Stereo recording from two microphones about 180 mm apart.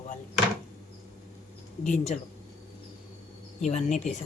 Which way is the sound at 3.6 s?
40° left (ahead or behind).